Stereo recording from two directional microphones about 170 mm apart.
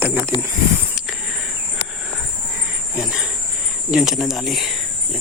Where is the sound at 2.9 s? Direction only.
5° right (ahead or behind).